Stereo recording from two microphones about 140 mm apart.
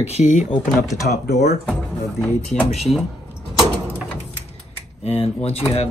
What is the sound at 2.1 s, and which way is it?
Speech, 10° left (ahead or behind).